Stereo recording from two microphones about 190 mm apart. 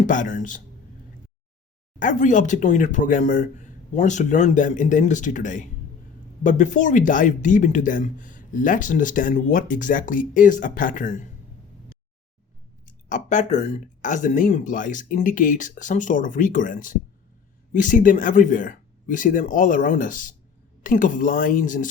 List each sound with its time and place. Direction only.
0.1 s speech: 40° left (ahead or behind)
2.0 s speech: 40° left (ahead or behind)
12.8 s speech: 40° left (ahead or behind)